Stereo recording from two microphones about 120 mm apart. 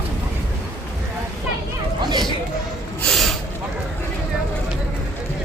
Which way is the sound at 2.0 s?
40° right (ahead or behind).